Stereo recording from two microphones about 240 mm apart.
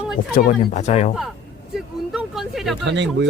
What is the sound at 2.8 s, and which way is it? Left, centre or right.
Speech, right.